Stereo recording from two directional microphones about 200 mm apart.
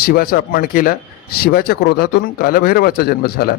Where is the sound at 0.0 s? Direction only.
50° left (ahead or behind).